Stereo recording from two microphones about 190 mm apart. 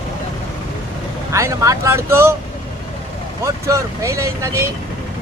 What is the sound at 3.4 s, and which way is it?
Speech, 15° right (ahead or behind).